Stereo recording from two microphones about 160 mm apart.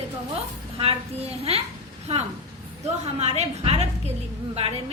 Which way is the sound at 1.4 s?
40° right (ahead or behind).